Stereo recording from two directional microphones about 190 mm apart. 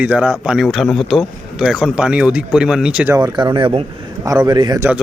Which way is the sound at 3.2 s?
20° right (ahead or behind).